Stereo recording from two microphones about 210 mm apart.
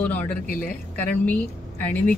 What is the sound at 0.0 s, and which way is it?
Speech, 5° left (ahead or behind).